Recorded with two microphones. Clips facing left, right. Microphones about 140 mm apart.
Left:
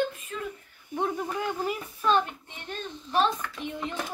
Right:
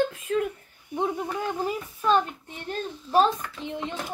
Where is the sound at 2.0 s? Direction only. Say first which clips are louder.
Right 2 dB; 15° right (ahead or behind).